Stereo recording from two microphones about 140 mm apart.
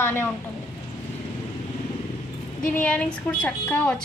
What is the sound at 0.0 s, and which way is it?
Speech, 15° left (ahead or behind).